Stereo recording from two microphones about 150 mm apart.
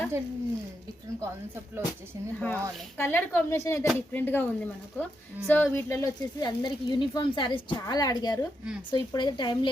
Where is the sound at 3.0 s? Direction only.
10° left (ahead or behind).